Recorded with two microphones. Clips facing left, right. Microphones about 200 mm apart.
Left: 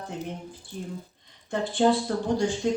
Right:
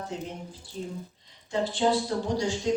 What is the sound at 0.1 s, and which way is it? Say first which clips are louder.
Speech: left 1 dB; 55° left (ahead or behind).